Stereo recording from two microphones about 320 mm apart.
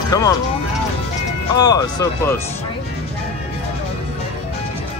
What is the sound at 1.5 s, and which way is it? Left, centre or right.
Speech, centre.